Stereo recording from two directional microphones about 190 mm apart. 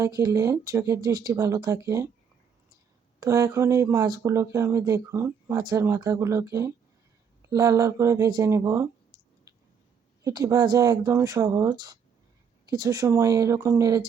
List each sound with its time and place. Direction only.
0.0 s speech: 20° right (ahead or behind)
3.2 s speech: 20° right (ahead or behind)
10.2 s speech: 15° right (ahead or behind)